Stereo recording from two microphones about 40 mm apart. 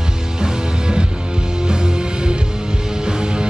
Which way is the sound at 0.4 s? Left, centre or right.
Centre.